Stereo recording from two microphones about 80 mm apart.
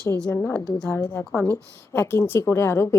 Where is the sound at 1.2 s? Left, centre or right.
Left.